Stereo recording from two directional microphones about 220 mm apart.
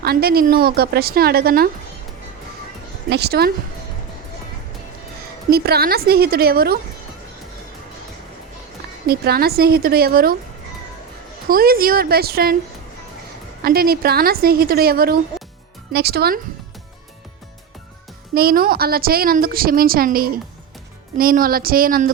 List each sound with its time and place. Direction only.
0.0 s a woman's voice: 45° right (ahead or behind)
3.1 s a woman's voice: 50° right (ahead or behind)
5.5 s a woman's voice: 45° right (ahead or behind)
9.0 s a woman's voice: 45° right (ahead or behind)
11.4 s a woman's voice: 40° right (ahead or behind)
13.6 s a woman's voice: 45° right (ahead or behind)
18.3 s a woman's voice: 45° right (ahead or behind)